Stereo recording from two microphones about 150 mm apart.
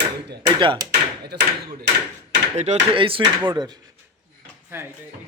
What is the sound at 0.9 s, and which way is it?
Speech, 90° right.